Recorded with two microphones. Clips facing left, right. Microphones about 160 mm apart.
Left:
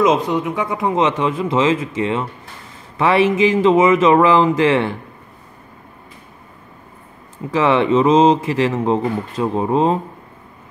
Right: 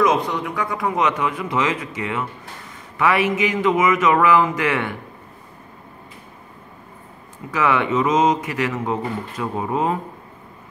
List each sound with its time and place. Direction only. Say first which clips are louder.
0.0 s speech: left 3 dB; 20° left (ahead or behind)
7.5 s speech: left 5 dB; 30° left (ahead or behind)